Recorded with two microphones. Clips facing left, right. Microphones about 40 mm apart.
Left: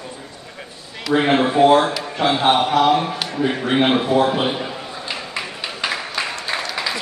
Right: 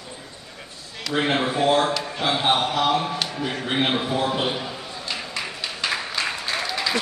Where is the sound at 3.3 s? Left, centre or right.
Left.